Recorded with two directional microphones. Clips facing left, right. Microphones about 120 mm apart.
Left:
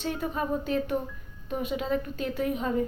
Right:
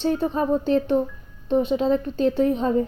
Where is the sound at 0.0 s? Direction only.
30° right (ahead or behind).